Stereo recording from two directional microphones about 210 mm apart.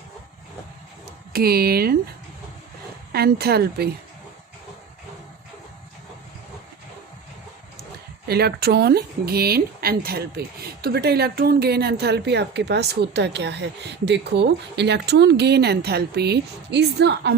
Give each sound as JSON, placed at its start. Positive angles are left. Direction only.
{"t": 1.3, "sound": "speech", "side_deg": -45}
{"t": 3.1, "sound": "speech", "side_deg": -50}
{"t": 8.3, "sound": "speech", "side_deg": -50}